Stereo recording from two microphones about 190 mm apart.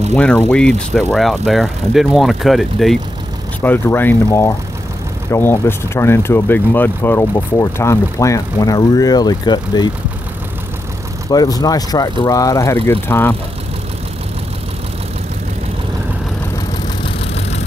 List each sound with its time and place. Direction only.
0.1 s speech: 10° left (ahead or behind)
3.6 s speech: 10° left (ahead or behind)
11.2 s speech: 20° left (ahead or behind)